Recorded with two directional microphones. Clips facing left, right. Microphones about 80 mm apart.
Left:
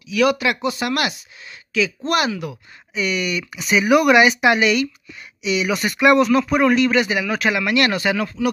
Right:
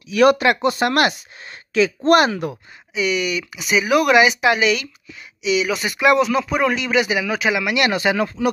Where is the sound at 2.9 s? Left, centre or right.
Centre; by 8.5 s right.